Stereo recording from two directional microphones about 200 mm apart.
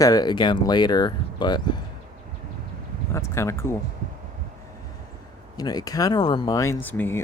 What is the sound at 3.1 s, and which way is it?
Speech, 15° left (ahead or behind).